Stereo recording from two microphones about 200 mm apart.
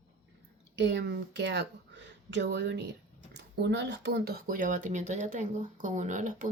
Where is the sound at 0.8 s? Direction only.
60° right (ahead or behind).